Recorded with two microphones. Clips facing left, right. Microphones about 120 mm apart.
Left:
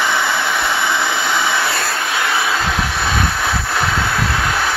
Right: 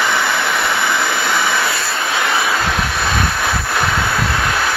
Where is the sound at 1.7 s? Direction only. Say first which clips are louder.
Left 1 dB; 45° left (ahead or behind).